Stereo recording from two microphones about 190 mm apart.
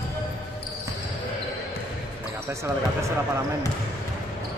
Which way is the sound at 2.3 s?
15° right (ahead or behind).